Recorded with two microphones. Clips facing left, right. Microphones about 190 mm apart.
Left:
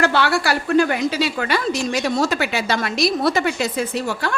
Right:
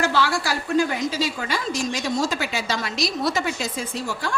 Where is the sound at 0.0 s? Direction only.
65° left (ahead or behind).